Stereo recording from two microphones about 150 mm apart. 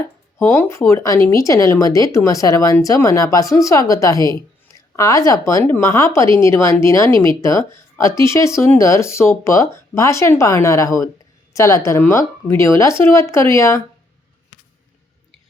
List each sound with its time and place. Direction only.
0.3 s a woman's voice: 15° left (ahead or behind)